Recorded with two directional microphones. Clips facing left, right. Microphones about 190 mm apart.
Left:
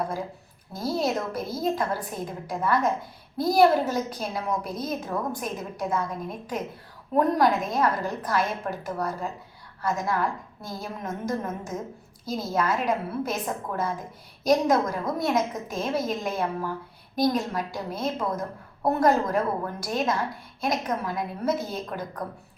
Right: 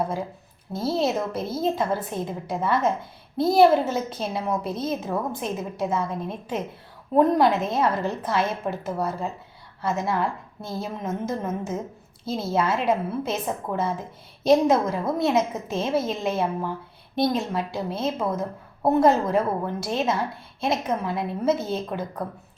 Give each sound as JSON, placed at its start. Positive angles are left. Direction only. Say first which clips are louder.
{"t": 0.7, "sound": "a woman's voice", "louder": "right 3 dB", "side_deg": -25}